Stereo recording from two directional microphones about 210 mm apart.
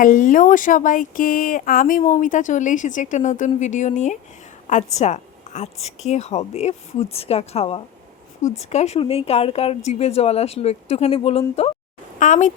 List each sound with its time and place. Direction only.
0.0 s a woman's voice: 40° left (ahead or behind)